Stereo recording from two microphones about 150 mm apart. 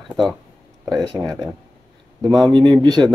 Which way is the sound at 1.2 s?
15° right (ahead or behind).